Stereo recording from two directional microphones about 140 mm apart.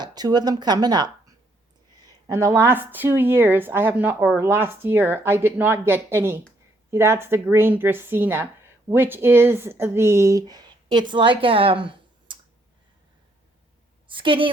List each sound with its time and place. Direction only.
0.0 s speech: 30° right (ahead or behind)
2.2 s speech: 20° right (ahead or behind); by 12.4 s 40° right (ahead or behind)
14.1 s a woman's voice: 35° right (ahead or behind)